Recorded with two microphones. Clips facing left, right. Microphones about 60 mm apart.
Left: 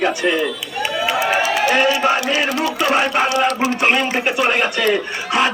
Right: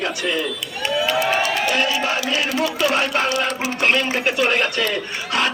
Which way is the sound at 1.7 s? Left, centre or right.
Left.